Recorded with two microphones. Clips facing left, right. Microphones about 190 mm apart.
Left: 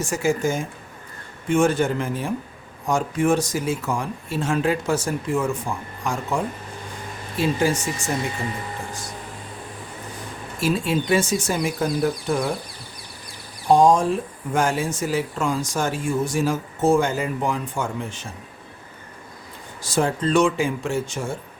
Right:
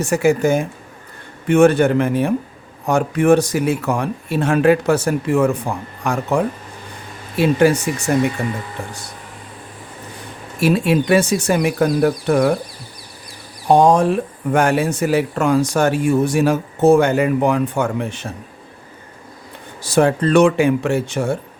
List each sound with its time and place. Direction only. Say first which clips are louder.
0.0 s speech: right 6 dB; 65° right (ahead or behind)
10.6 s speech: right 6 dB; 65° right (ahead or behind)
13.7 s speech: right 3 dB; 65° right (ahead or behind)
19.8 s speech: right 7 dB; 65° right (ahead or behind)